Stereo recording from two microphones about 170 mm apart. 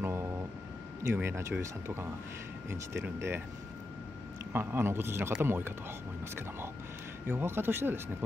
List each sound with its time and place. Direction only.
0.0 s vehicle: 15° right (ahead or behind)
1.0 s a man's voice: 15° right (ahead or behind)
3.2 s a man's voice: 15° right (ahead or behind)
4.5 s a man's voice: 15° right (ahead or behind)
7.2 s a man's voice: 15° right (ahead or behind)